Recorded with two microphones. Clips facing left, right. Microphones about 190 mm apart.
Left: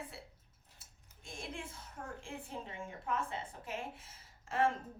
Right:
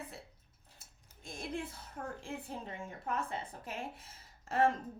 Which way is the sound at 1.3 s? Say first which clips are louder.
Right 5 dB; 40° right (ahead or behind).